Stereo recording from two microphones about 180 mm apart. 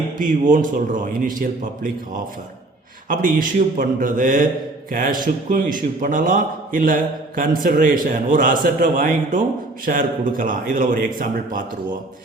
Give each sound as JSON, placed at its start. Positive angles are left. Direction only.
{"t": 0.2, "sound": "a man's voice", "side_deg": -45}
{"t": 3.1, "sound": "a man's voice", "side_deg": -50}